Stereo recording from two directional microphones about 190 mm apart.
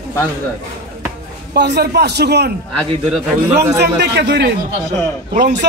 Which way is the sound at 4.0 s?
60° right (ahead or behind).